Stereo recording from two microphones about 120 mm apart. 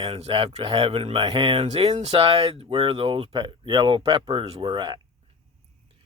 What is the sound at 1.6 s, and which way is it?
Speech, 60° right (ahead or behind).